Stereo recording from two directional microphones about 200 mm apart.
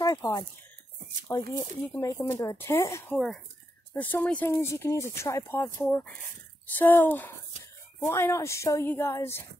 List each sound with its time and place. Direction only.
0.0 s a sound: 20° left (ahead or behind)
1.3 s speech: 15° left (ahead or behind)
3.1 s speech: centre (ahead or behind)